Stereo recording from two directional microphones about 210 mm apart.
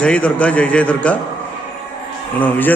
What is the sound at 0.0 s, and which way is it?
A man's voice, 5° left (ahead or behind).